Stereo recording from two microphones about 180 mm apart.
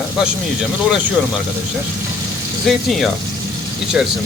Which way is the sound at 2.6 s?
Centre (ahead or behind).